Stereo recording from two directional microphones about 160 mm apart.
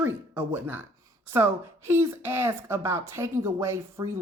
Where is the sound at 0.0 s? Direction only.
10° right (ahead or behind).